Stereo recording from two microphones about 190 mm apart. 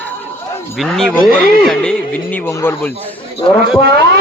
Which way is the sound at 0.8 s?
5° left (ahead or behind).